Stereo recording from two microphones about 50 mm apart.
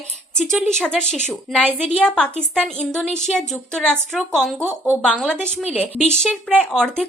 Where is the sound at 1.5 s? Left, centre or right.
Centre.